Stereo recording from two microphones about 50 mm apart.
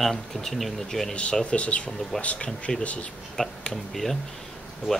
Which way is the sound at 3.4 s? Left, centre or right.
Centre.